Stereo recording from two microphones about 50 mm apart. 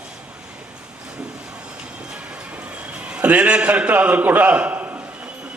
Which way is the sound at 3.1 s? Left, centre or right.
Right.